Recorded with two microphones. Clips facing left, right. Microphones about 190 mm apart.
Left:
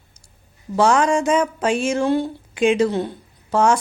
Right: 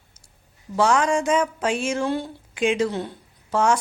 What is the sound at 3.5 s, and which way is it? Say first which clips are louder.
Speech: left 3 dB; 40° left (ahead or behind).